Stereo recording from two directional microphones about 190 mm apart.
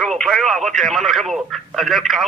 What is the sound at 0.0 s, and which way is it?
Speech, centre (ahead or behind).